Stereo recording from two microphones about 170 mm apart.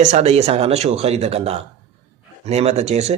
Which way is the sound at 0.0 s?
40° right (ahead or behind).